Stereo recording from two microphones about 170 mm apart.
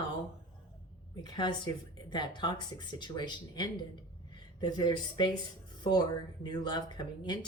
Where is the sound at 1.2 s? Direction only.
25° left (ahead or behind).